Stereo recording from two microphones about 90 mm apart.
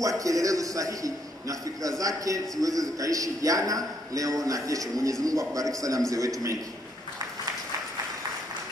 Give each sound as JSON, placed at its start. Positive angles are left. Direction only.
{"t": 0.2, "sound": "a man's voice", "side_deg": -40}